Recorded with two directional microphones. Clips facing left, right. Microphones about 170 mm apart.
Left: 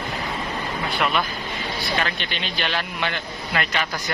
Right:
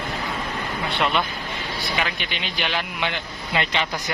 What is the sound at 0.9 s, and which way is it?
Speech, 25° right (ahead or behind).